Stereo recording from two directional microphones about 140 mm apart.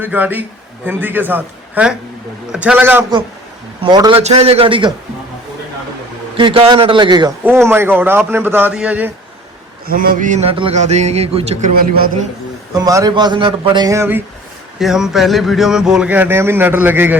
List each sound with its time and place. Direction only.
0.0 s a man's voice: 15° right (ahead or behind)
3.8 s a man's voice: 30° right (ahead or behind)
4.2 s a sound: 50° right (ahead or behind)
6.3 s a man's voice: 40° right (ahead or behind)
7.4 s a man's voice: 15° right (ahead or behind)
9.8 s a man's voice: 90° right; by 10.5 s 60° right (ahead or behind)
10.5 s a man's voice: 40° right (ahead or behind)
10.8 s a sound: 55° right (ahead or behind)
12.7 s a man's voice: 25° right (ahead or behind)
13.9 s speech: 20° right (ahead or behind)
14.8 s speech: 5° right (ahead or behind)